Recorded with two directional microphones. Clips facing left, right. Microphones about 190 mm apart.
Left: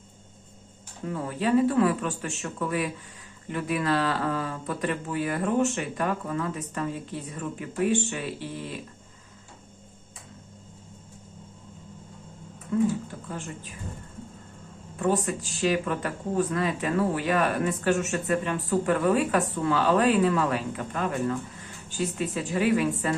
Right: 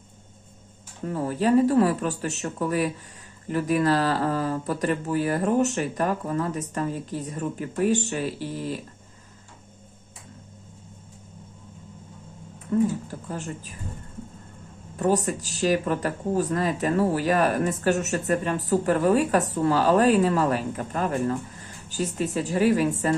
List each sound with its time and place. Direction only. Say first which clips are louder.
1.0 s speech: right 4 dB; 40° right (ahead or behind)
13.1 s speech: right 3 dB; 40° right (ahead or behind)
14.9 s speech: right 2 dB; 40° right (ahead or behind)